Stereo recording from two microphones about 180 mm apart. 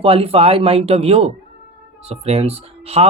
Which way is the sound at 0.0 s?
30° right (ahead or behind).